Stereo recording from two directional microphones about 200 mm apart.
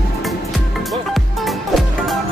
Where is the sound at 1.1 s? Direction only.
Centre (ahead or behind).